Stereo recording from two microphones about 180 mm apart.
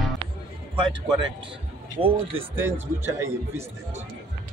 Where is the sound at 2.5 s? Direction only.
15° right (ahead or behind).